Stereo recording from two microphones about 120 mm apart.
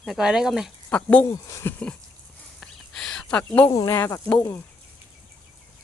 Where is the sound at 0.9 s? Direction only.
10° left (ahead or behind).